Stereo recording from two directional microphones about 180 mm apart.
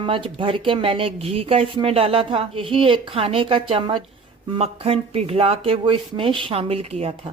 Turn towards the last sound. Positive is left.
turn(degrees=-35)  # may be behind; listen again after turning